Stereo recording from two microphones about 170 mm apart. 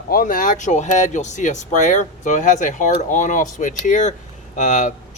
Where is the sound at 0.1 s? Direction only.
55° left (ahead or behind).